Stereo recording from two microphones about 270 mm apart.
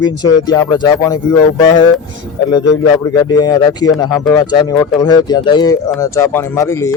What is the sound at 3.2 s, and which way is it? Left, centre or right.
Speech, centre.